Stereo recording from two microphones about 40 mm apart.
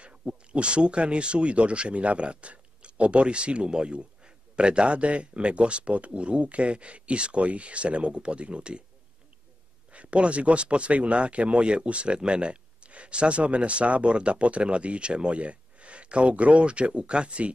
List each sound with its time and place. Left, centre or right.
0.5 s speech: right
9.9 s speech: right